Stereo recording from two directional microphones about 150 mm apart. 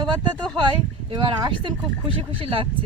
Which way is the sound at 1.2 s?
35° right (ahead or behind).